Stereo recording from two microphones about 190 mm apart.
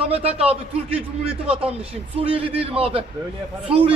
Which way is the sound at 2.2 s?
30° right (ahead or behind).